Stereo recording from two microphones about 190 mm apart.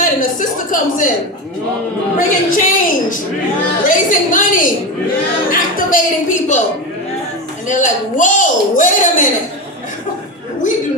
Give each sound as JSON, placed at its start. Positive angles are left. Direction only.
{"t": 0.0, "sound": "a sound", "side_deg": 45}
{"t": 2.1, "sound": "a woman's voice", "side_deg": 45}
{"t": 7.7, "sound": "speech", "side_deg": 40}